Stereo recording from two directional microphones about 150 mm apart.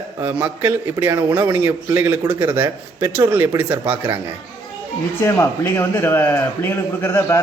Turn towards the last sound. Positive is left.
turn(degrees=15)  # may be behind; listen again after turning